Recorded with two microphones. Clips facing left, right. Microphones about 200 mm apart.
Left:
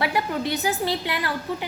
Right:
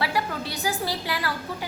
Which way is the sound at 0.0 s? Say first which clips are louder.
Left 3 dB; 20° left (ahead or behind).